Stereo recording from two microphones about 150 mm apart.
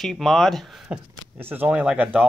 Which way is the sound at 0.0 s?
Centre (ahead or behind).